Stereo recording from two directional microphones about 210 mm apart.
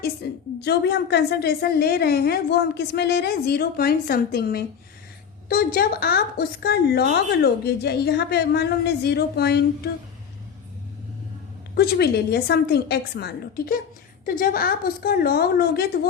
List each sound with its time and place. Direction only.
0.0 s a woman's voice: 50° left (ahead or behind)
11.7 s a woman's voice: 50° left (ahead or behind)